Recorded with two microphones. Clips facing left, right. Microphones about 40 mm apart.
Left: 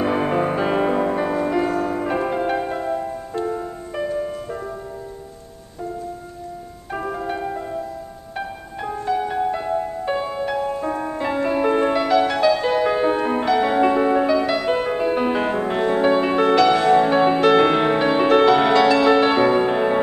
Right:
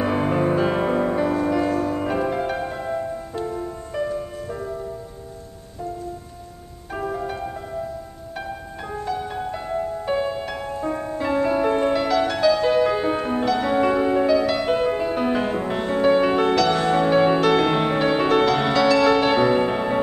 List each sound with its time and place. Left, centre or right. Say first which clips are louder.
0.0 s music: left 1 dB; centre
3.4 s music: left 2 dB; centre
6.9 s music: left 1 dB; centre